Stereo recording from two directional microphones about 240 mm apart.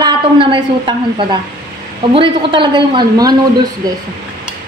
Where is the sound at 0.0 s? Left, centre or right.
Centre.